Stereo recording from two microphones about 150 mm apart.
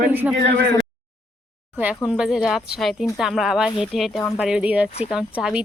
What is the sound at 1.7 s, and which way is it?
Speech, 5° right (ahead or behind).